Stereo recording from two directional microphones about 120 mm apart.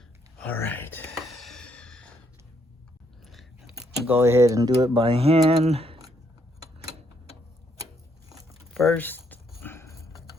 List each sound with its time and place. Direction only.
0.3 s speech: 15° left (ahead or behind)
1.1 s a sound: centre (ahead or behind)
3.2 s keys jangling: centre (ahead or behind)
4.0 s speech: 20° right (ahead or behind); by 6.0 s 55° right (ahead or behind)
8.8 s dog: 15° left (ahead or behind)